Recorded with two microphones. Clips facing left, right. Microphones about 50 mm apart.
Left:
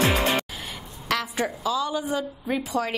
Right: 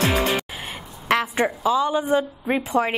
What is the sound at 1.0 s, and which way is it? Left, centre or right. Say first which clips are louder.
A woman's voice: right 6 dB; right.